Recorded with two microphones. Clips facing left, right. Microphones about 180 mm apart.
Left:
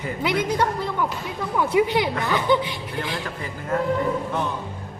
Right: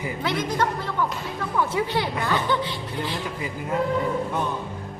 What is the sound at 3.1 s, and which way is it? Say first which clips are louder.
Speech: even; 15° right (ahead or behind).